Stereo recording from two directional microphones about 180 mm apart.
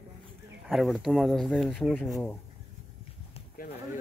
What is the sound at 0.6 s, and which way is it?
Speech, centre (ahead or behind).